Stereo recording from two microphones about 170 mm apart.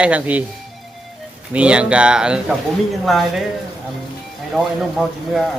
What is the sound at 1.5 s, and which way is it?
Speech, 5° right (ahead or behind).